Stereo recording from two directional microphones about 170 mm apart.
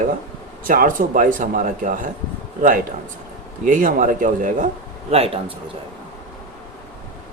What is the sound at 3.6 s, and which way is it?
Speech, 50° right (ahead or behind).